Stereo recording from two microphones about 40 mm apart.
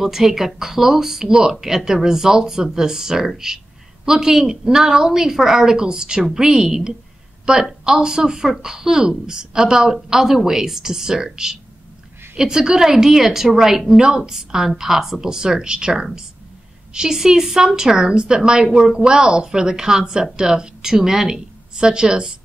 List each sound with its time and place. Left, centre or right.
0.0 s a woman's voice: centre
21.7 s a woman's voice: right